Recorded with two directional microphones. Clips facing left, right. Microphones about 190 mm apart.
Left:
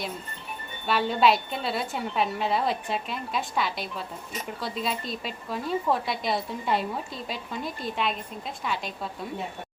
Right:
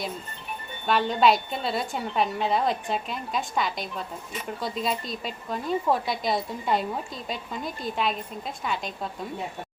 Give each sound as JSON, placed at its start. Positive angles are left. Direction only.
{"t": 0.9, "sound": "a woman's voice", "side_deg": 5}